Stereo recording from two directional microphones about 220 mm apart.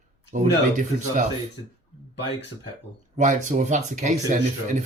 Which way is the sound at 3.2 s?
35° right (ahead or behind).